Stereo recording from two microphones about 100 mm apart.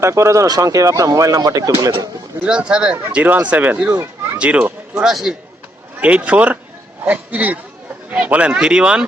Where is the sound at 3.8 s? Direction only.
30° right (ahead or behind).